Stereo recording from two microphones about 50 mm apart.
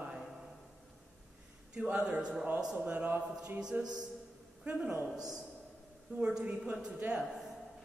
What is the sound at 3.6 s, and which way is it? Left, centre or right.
Speech, centre.